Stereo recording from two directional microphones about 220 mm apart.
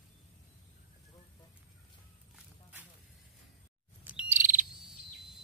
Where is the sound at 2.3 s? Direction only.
5° right (ahead or behind).